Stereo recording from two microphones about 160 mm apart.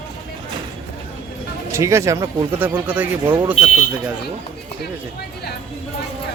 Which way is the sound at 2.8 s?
10° right (ahead or behind).